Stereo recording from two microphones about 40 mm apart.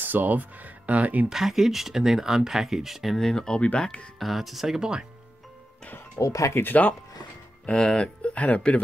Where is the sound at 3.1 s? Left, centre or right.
Centre.